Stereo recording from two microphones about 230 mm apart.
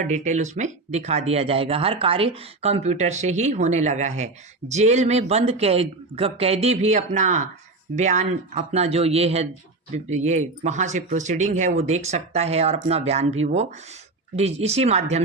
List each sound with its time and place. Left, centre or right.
0.0 s speech: right